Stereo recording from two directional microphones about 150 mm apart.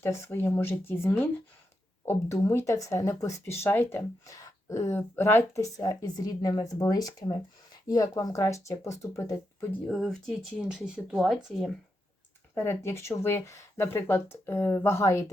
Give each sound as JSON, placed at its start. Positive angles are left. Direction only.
{"t": 0.0, "sound": "speech", "side_deg": 15}
{"t": 9.8, "sound": "speech", "side_deg": 0}
{"t": 12.5, "sound": "speech", "side_deg": 15}